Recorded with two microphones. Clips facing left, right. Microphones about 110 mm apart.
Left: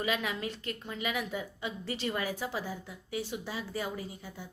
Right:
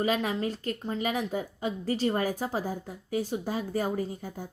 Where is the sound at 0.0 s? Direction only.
40° right (ahead or behind).